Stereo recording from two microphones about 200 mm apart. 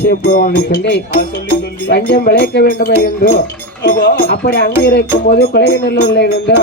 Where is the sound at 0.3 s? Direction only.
50° left (ahead or behind).